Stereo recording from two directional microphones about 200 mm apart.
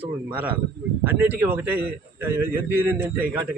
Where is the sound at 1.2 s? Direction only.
10° right (ahead or behind).